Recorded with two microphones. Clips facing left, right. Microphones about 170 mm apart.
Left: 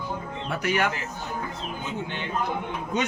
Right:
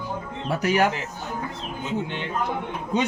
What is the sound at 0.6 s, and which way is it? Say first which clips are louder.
Speech: right 4 dB; 35° right (ahead or behind).